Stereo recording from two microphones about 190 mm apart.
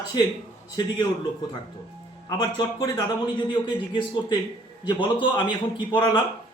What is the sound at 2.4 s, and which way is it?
A man's voice, 20° left (ahead or behind).